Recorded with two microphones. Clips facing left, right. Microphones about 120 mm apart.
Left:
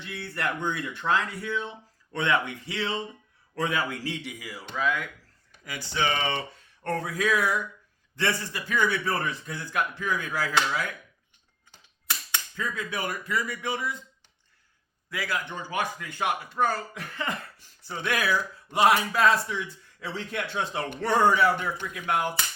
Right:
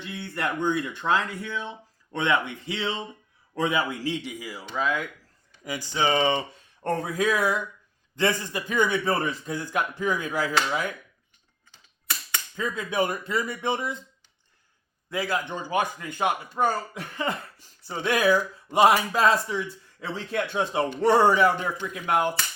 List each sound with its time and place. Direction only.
0.0 s speech: 15° right (ahead or behind)
12.5 s speech: 20° right (ahead or behind)
15.1 s speech: 25° right (ahead or behind)